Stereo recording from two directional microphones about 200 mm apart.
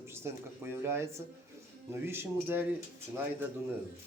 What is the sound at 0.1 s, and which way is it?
Speech, 10° right (ahead or behind).